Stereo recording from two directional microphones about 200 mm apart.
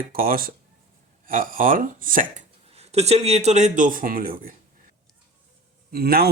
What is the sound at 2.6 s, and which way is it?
Speech, 30° right (ahead or behind).